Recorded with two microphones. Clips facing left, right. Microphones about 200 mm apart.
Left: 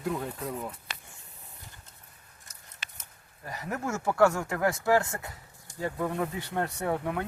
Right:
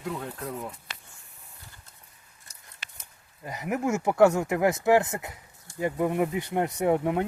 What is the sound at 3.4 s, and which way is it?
Speech, 15° right (ahead or behind).